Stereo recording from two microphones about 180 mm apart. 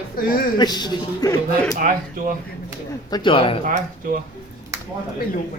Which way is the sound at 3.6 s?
45° right (ahead or behind).